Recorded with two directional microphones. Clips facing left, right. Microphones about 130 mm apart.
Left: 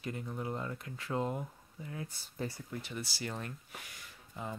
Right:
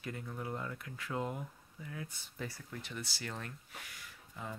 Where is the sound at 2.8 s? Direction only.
10° left (ahead or behind).